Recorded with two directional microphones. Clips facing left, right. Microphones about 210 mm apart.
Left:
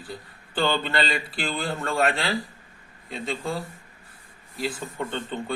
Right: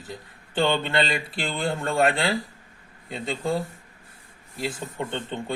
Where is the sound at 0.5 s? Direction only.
25° right (ahead or behind).